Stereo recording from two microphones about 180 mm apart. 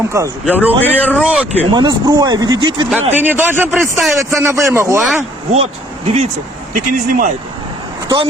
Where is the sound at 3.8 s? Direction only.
Centre (ahead or behind).